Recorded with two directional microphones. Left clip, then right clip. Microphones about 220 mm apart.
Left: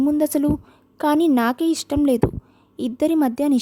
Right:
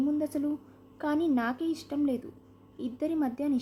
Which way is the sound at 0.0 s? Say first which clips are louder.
Left 11 dB; 45° left (ahead or behind).